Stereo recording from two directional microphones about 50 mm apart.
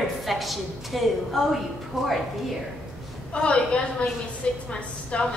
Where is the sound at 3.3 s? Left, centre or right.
Left.